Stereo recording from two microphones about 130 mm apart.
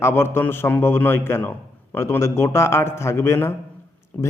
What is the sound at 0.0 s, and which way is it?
A man's voice, 20° left (ahead or behind).